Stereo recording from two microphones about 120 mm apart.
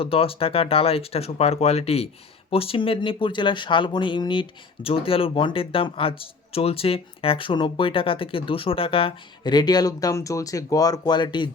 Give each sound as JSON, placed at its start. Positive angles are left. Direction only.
{"t": 0.0, "sound": "speech", "side_deg": 50}